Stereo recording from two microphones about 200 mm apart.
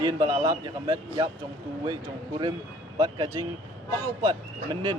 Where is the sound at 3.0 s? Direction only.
20° right (ahead or behind).